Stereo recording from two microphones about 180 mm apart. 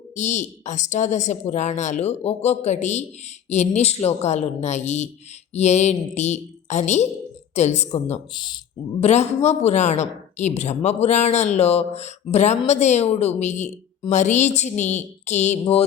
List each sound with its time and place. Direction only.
0.2 s a woman's voice: 40° left (ahead or behind)
8.3 s speech: 25° left (ahead or behind)
9.0 s a woman's voice: 40° left (ahead or behind)